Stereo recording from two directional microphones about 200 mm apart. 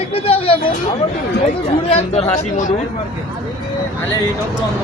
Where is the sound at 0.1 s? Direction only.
30° left (ahead or behind).